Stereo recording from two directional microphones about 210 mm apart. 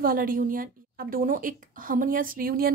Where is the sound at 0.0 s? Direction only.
45° right (ahead or behind).